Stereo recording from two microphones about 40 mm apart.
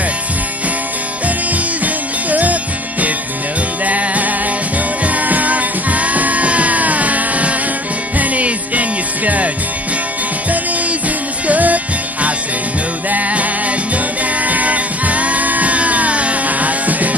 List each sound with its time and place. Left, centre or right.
2.2 s music: right
11.4 s music: right